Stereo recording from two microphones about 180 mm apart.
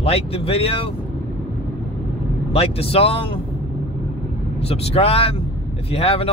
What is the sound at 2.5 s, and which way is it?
Speech, 35° left (ahead or behind).